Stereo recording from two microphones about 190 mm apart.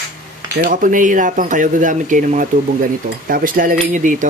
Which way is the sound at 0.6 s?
45° right (ahead or behind).